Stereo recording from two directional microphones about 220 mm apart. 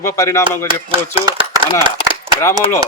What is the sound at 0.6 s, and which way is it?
Speech, 25° right (ahead or behind).